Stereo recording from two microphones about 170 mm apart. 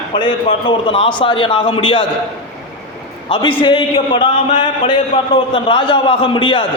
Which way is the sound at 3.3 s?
30° left (ahead or behind).